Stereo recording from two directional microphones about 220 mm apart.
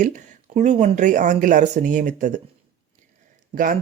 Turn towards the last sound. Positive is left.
turn(degrees=-40)  # may be behind; listen again after turning